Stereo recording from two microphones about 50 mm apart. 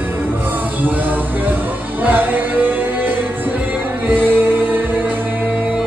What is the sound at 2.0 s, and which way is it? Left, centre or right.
Music, right.